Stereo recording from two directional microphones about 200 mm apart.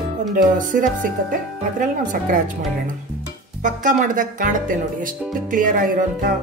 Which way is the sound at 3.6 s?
40° right (ahead or behind).